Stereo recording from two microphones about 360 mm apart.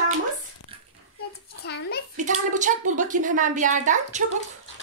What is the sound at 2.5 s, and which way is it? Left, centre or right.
A woman's voice, right.